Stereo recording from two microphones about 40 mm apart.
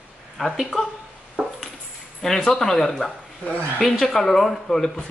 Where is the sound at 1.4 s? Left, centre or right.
Right.